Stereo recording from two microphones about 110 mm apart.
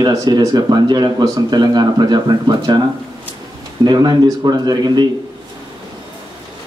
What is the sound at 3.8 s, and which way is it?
A man's voice, 40° right (ahead or behind).